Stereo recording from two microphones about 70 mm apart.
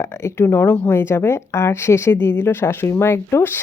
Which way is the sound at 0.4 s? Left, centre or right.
Left.